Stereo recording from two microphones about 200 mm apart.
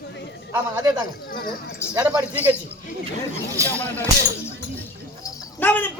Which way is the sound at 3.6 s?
15° right (ahead or behind).